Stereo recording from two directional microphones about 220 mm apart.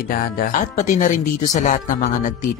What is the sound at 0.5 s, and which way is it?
Speech, 35° left (ahead or behind).